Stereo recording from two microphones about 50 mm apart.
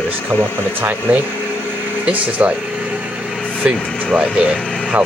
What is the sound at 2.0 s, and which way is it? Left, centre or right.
Speech, right.